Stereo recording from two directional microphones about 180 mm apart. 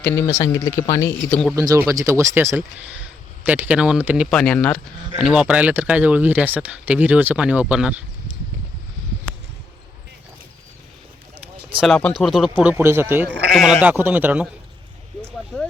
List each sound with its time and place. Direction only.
0.0 s speech: 15° left (ahead or behind)
1.3 s speech: centre (ahead or behind)
1.5 s speech: 15° right (ahead or behind)
4.4 s speech: 5° left (ahead or behind)
5.2 s speech: 5° right (ahead or behind)
11.8 s speech: 5° left (ahead or behind); by 13.4 s 10° right (ahead or behind)
13.5 s speech: centre (ahead or behind)
13.8 s speech: 10° right (ahead or behind)